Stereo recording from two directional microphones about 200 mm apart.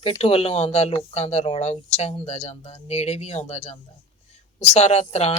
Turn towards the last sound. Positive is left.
turn(degrees=30)  # may be behind; listen again after turning